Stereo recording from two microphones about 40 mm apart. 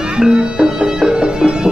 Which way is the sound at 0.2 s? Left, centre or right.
Right.